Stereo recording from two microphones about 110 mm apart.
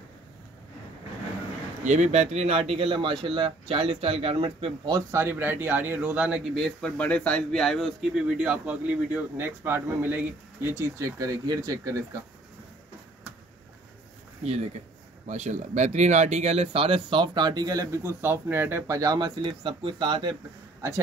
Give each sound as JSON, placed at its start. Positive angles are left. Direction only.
{"t": 1.9, "sound": "speech", "side_deg": -90}
{"t": 5.1, "sound": "speech", "side_deg": -20}
{"t": 6.6, "sound": "speech", "side_deg": 10}
{"t": 15.2, "sound": "speech", "side_deg": -90}